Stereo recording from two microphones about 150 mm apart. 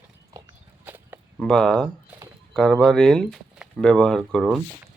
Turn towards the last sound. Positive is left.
turn(degrees=5)  # may be behind; listen again after turning